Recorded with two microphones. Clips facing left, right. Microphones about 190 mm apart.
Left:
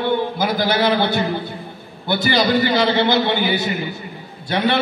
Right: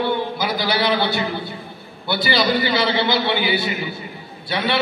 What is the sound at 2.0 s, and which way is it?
A man's voice, 45° left (ahead or behind).